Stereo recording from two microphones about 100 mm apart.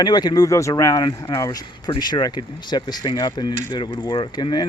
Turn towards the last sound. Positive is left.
turn(degrees=45)  # may be behind; listen again after turning